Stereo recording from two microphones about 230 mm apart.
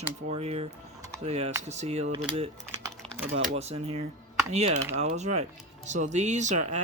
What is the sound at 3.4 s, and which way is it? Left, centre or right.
Speech, right.